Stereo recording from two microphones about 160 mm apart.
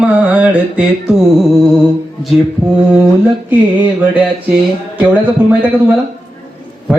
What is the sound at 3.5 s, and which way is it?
Speech, 10° right (ahead or behind).